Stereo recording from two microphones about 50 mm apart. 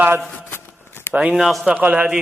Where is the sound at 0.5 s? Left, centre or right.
Left.